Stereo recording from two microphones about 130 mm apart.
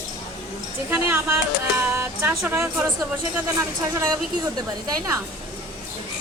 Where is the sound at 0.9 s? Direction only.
15° right (ahead or behind).